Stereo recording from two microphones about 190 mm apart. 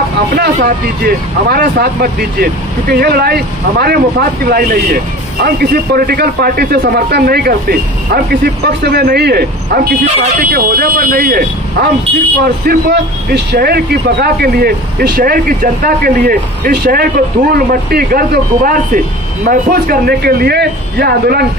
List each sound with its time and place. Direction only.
0.4 s a man's voice: 55° right (ahead or behind)